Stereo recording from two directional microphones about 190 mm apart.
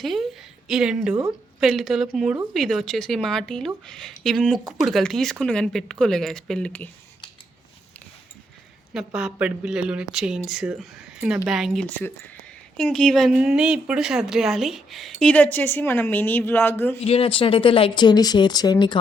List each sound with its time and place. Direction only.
0.0 s a woman's voice: centre (ahead or behind)
8.9 s a woman's voice: 5° right (ahead or behind)
17.0 s speech: 30° left (ahead or behind)